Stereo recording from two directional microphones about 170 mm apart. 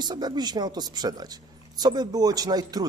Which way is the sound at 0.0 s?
25° right (ahead or behind).